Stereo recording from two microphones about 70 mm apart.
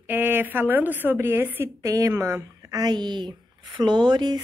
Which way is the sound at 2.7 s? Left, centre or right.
Right.